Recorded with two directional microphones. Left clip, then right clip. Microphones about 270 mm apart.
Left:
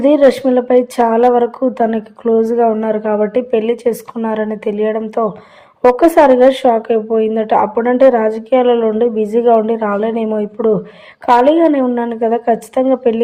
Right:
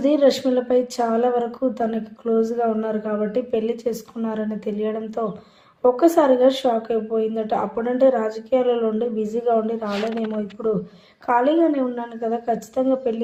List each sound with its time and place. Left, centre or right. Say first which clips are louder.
0.0 s speech: left 8 dB; left